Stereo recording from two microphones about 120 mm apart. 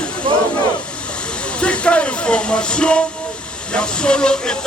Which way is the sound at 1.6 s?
10° left (ahead or behind).